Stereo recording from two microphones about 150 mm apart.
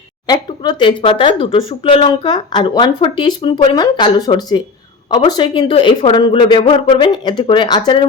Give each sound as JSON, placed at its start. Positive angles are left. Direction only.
{"t": 0.3, "sound": "speech", "side_deg": 30}